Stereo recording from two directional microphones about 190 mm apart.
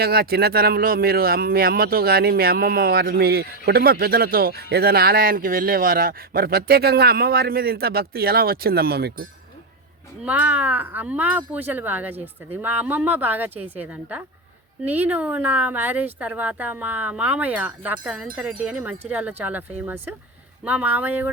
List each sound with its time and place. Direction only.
0.0 s speech: 55° right (ahead or behind)
10.2 s speech: 10° right (ahead or behind)